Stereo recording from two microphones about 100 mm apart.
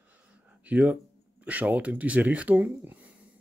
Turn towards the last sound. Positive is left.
turn(degrees=-15)  # may be behind; listen again after turning